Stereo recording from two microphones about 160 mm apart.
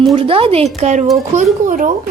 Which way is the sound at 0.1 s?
35° right (ahead or behind).